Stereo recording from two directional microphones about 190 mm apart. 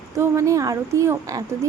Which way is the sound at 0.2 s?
15° right (ahead or behind).